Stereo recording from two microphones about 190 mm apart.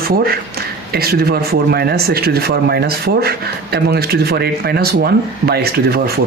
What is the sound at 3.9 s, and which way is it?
Speech, 55° right (ahead or behind).